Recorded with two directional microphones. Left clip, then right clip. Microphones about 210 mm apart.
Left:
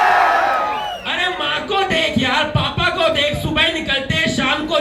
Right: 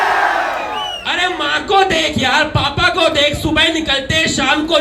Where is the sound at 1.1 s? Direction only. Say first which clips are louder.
Right 3 dB; 30° right (ahead or behind).